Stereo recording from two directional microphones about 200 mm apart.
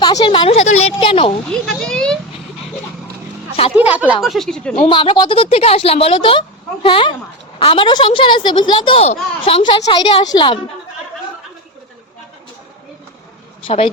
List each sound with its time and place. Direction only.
0.0 s a woman's voice: 20° left (ahead or behind)
1.5 s a child's voice: 5° left (ahead or behind)
3.8 s speech: 10° right (ahead or behind)
4.7 s speech: 25° left (ahead or behind)
13.7 s speech: 30° left (ahead or behind)